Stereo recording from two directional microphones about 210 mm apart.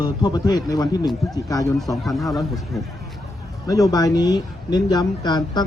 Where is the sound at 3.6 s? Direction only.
15° left (ahead or behind).